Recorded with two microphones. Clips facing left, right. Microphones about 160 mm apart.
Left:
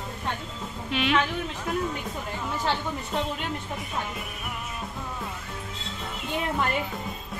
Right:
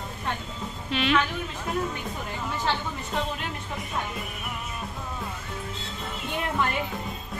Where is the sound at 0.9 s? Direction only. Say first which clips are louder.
Right 1 dB; 10° left (ahead or behind).